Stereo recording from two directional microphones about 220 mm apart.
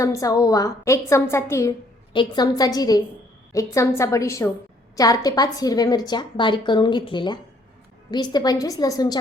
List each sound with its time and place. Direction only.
0.0 s a woman's voice: 15° left (ahead or behind)